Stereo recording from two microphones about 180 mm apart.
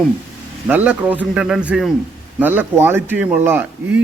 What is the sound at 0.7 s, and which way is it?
A man's voice, 10° right (ahead or behind).